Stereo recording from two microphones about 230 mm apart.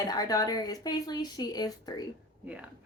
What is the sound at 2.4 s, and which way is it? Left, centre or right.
Speech, centre.